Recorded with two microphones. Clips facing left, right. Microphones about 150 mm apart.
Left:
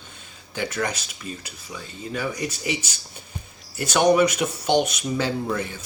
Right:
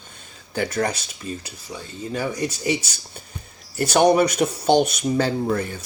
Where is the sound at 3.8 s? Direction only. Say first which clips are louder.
Right 2 dB; 40° right (ahead or behind).